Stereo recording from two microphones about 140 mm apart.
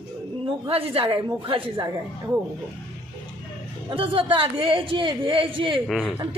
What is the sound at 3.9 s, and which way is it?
A man's voice, 40° right (ahead or behind).